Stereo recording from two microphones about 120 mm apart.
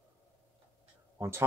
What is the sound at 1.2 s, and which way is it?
Speech, 20° right (ahead or behind).